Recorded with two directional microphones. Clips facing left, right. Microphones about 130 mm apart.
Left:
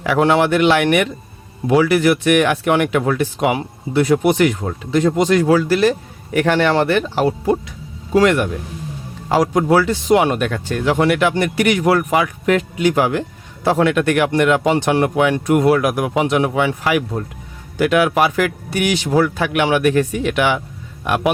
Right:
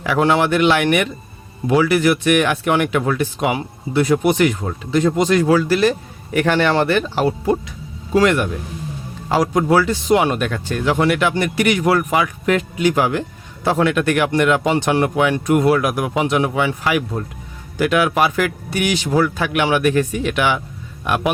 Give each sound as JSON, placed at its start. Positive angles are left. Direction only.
{"t": 0.0, "sound": "speech", "side_deg": 65}
{"t": 7.3, "sound": "speech", "side_deg": 25}
{"t": 8.1, "sound": "speech", "side_deg": 55}
{"t": 9.5, "sound": "speech", "side_deg": 50}
{"t": 11.8, "sound": "speech", "side_deg": 50}
{"t": 13.7, "sound": "speech", "side_deg": 65}